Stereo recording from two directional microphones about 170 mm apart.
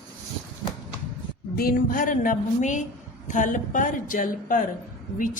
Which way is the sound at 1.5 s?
55° left (ahead or behind).